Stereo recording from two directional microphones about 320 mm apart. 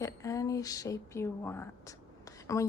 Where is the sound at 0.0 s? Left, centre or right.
Centre.